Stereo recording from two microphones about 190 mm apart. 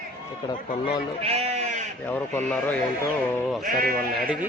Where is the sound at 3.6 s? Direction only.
45° right (ahead or behind).